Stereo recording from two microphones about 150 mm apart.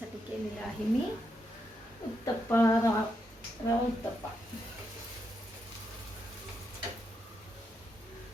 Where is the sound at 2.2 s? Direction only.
15° left (ahead or behind).